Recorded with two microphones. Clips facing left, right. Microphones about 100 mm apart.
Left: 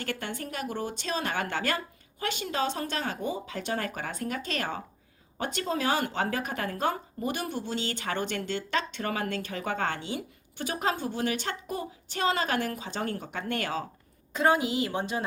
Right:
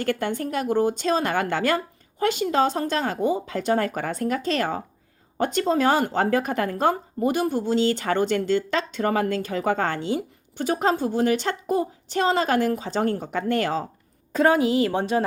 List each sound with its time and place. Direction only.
0.0 s a woman's voice: 50° right (ahead or behind)